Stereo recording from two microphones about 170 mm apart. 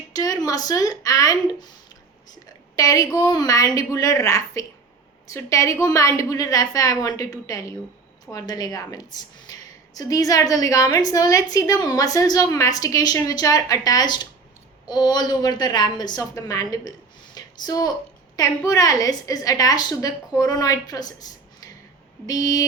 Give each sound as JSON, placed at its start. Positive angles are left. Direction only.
{"t": 0.1, "sound": "a woman's voice", "side_deg": 20}
{"t": 2.7, "sound": "a woman's voice", "side_deg": 20}
{"t": 17.3, "sound": "a sound", "side_deg": 25}
{"t": 18.3, "sound": "a woman's voice", "side_deg": 20}